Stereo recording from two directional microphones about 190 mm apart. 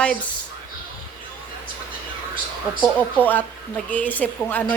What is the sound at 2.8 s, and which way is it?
A woman's voice, 10° left (ahead or behind).